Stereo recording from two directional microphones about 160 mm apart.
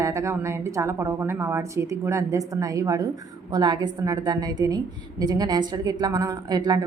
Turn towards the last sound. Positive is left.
turn(degrees=-25)  # may be behind; listen again after turning